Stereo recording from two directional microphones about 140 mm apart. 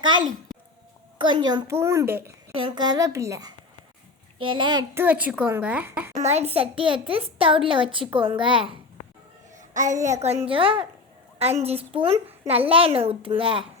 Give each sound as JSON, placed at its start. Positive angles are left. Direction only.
{"t": 0.0, "sound": "a child's voice", "side_deg": -35}
{"t": 1.6, "sound": "a woman's voice", "side_deg": -20}
{"t": 2.5, "sound": "a woman's voice", "side_deg": -40}
{"t": 4.4, "sound": "a child's voice", "side_deg": -35}
{"t": 4.9, "sound": "a woman's voice", "side_deg": -10}
{"t": 6.2, "sound": "a child's voice", "side_deg": -50}
{"t": 9.6, "sound": "a sound", "side_deg": -60}
{"t": 9.9, "sound": "a woman's voice", "side_deg": -20}
{"t": 10.2, "sound": "a child's voice", "side_deg": -50}